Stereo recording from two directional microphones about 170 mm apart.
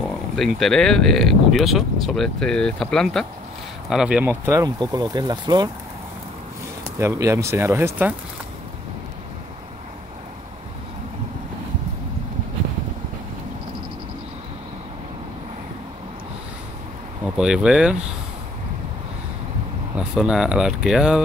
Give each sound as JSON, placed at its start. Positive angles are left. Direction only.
{"t": 0.0, "sound": "speech", "side_deg": 0}
{"t": 7.0, "sound": "speech", "side_deg": -15}
{"t": 17.4, "sound": "speech", "side_deg": -5}
{"t": 20.0, "sound": "speech", "side_deg": -5}